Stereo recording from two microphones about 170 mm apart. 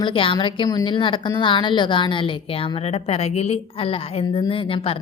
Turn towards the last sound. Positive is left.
turn(degrees=35)  # may be behind; listen again after turning